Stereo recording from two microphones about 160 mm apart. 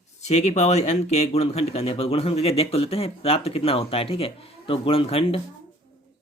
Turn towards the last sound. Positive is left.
turn(degrees=35)  # may be behind; listen again after turning